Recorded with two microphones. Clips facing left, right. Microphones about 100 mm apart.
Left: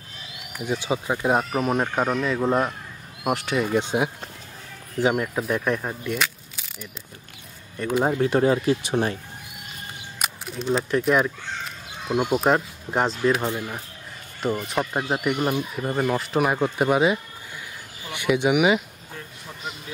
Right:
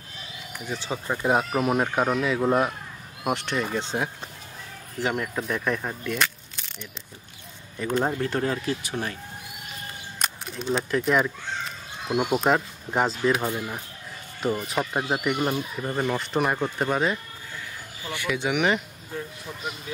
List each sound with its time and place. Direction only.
0.7 s speech: 15° left (ahead or behind)
7.9 s speech: 10° left (ahead or behind)
10.1 s speech: 5° left (ahead or behind)
14.7 s speech: centre (ahead or behind)